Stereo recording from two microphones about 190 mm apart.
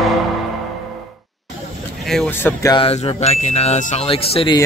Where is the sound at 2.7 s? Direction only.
30° left (ahead or behind).